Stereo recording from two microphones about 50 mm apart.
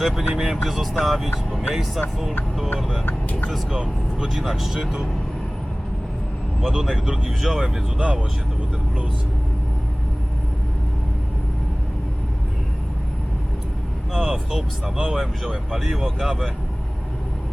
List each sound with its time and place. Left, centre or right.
0.0 s speech: centre
3.7 s speech: centre
6.6 s speech: centre
7.9 s speech: centre
14.1 s speech: centre